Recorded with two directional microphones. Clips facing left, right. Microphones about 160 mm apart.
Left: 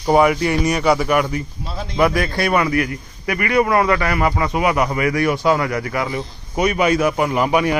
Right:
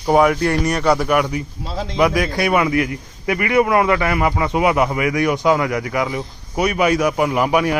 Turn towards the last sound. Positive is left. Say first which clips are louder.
# even
turn(degrees=-5)  # may be behind; listen again after turning